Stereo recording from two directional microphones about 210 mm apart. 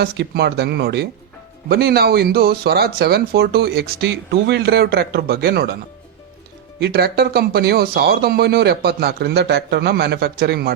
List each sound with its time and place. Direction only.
0.0 s speech: 50° right (ahead or behind)
6.7 s speech: 50° right (ahead or behind)